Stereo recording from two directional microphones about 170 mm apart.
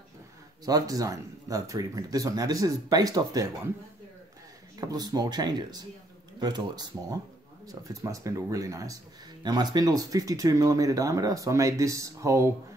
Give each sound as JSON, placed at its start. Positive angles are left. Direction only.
{"t": 0.7, "sound": "speech", "side_deg": -20}
{"t": 4.7, "sound": "speech", "side_deg": -20}